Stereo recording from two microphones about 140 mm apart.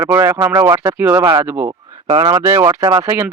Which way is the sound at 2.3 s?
20° right (ahead or behind).